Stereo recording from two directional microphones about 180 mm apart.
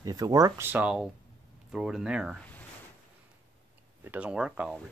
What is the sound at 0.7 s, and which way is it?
Speech, 5° right (ahead or behind).